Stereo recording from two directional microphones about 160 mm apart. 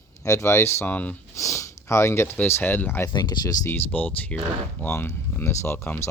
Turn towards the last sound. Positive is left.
turn(degrees=15)  # may be behind; listen again after turning